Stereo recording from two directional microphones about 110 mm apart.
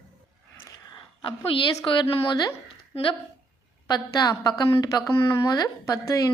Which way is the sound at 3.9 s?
35° left (ahead or behind).